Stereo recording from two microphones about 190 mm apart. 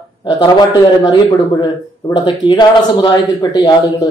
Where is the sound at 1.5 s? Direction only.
20° left (ahead or behind).